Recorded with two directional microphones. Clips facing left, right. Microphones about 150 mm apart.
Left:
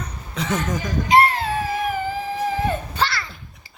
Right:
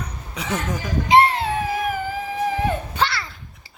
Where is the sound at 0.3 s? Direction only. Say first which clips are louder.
Left 2 dB; 10° right (ahead or behind).